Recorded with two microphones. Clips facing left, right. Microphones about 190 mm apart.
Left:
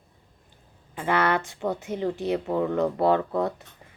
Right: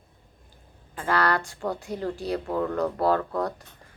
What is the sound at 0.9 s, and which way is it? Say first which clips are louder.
Speech: left 1 dB; 20° left (ahead or behind).